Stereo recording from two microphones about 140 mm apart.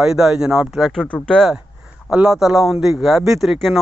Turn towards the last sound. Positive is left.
turn(degrees=0)  # may be behind; listen again after turning